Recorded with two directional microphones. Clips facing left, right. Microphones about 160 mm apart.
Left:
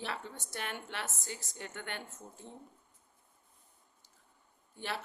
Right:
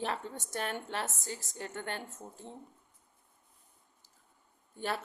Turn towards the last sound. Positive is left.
turn(degrees=-45)  # may be behind; listen again after turning